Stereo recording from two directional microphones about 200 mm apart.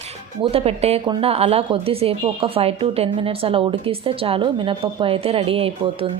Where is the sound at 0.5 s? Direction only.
30° right (ahead or behind).